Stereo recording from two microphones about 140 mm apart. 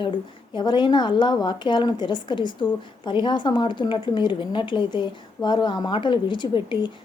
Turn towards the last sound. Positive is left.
turn(degrees=35)  # may be behind; listen again after turning